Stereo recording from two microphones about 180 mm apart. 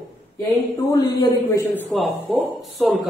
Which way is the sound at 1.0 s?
20° left (ahead or behind).